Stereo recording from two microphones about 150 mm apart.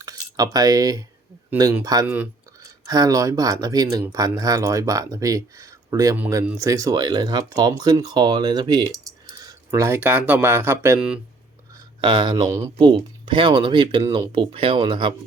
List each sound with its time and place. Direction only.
0.0 s speech: 25° right (ahead or behind)
6.1 s speech: 10° right (ahead or behind)
11.9 s speech: 30° right (ahead or behind)
12.7 s speech: 35° right (ahead or behind)